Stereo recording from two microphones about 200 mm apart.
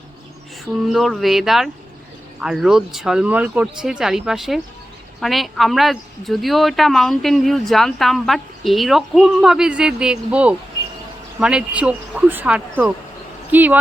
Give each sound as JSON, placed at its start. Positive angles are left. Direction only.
{"t": 0.9, "sound": "speech", "side_deg": 0}